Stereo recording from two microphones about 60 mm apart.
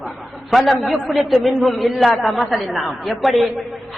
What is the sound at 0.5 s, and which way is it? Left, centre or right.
A man's voice, centre.